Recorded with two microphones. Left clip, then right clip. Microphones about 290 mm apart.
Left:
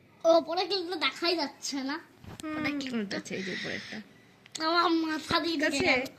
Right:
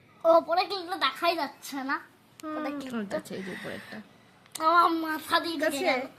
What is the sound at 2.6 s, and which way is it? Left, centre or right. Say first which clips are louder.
A woman's voice: left 1 dB; centre.